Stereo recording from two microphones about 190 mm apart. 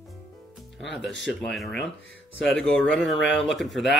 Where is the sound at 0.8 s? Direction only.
Centre (ahead or behind).